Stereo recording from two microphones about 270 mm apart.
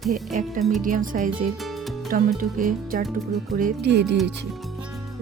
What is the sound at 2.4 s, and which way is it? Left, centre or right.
Speech, right.